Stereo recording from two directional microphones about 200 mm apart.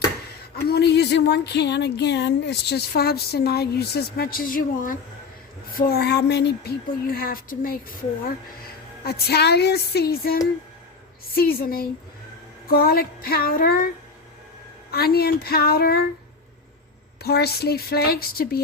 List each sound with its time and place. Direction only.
0.5 s speech: 50° left (ahead or behind)
17.2 s speech: 55° left (ahead or behind)